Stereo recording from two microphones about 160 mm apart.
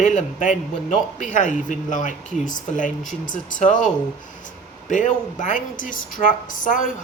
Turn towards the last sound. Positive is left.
turn(degrees=55)  # may be behind; listen again after turning